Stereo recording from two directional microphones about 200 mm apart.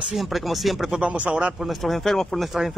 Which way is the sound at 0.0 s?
Centre (ahead or behind).